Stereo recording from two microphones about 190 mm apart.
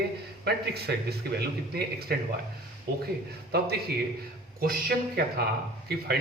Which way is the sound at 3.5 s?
60° right (ahead or behind).